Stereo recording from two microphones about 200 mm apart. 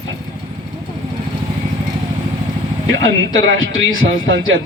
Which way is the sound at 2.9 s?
75° right (ahead or behind).